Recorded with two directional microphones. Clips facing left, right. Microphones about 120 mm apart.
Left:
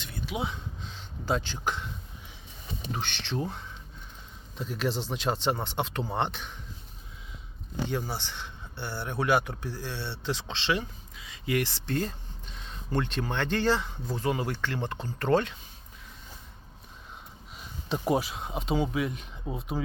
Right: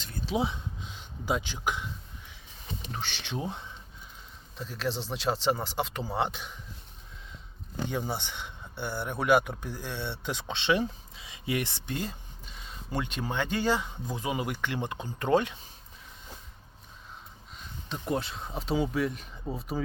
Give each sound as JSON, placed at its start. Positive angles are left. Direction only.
{"t": 0.0, "sound": "a sound", "side_deg": -35}
{"t": 0.4, "sound": "a sound", "side_deg": -15}
{"t": 3.0, "sound": "speech", "side_deg": 0}
{"t": 3.2, "sound": "speech", "side_deg": -10}
{"t": 4.5, "sound": "speech", "side_deg": 0}
{"t": 8.1, "sound": "a man's voice", "side_deg": -15}
{"t": 10.8, "sound": "speech", "side_deg": -25}
{"t": 17.6, "sound": "a sound", "side_deg": 15}
{"t": 18.1, "sound": "speech", "side_deg": 5}